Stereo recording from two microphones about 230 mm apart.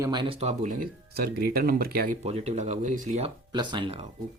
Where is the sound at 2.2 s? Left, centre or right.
Right.